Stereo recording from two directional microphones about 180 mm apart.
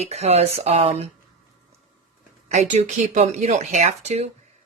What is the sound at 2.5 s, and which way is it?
Speech, 40° right (ahead or behind).